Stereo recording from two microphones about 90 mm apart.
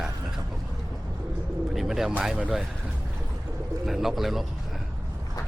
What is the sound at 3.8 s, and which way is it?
Speech, 5° right (ahead or behind).